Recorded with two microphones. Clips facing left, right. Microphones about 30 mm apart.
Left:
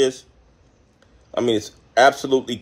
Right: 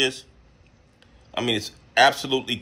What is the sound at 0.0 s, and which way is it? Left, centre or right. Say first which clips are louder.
Speech: left 5 dB; right.